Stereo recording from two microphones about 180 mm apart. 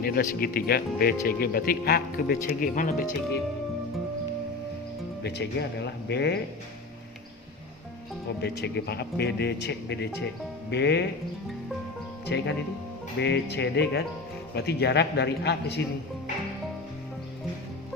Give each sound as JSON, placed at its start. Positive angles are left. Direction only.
{"t": 0.0, "sound": "speech", "side_deg": 60}
{"t": 5.2, "sound": "a man's voice", "side_deg": 65}
{"t": 8.4, "sound": "a man's voice", "side_deg": 65}
{"t": 12.2, "sound": "a man's voice", "side_deg": 70}